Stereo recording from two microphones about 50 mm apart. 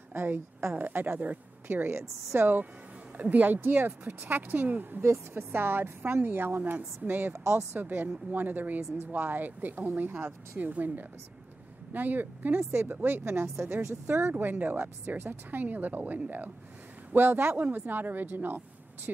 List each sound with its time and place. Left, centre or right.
0.1 s a woman's voice: right
1.9 s speech: right
3.2 s speech: right
5.0 s a woman's voice: right
5.5 s speech: right
7.3 s speech: right
7.8 s speech: right